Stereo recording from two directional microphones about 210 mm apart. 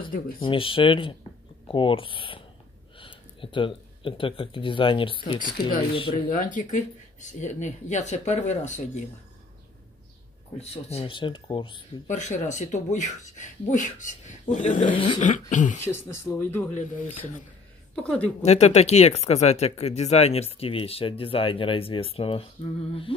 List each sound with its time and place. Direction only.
0.4 s speech: 25° left (ahead or behind)
5.4 s speech: 45° left (ahead or behind)
10.6 s speech: 30° left (ahead or behind)
12.1 s speech: 35° left (ahead or behind)
15.8 s speech: 10° left (ahead or behind)
17.9 s a woman's voice: 5° left (ahead or behind)
18.4 s speech: 30° left (ahead or behind)